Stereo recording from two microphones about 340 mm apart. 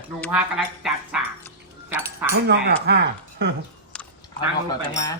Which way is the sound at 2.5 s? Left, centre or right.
Right.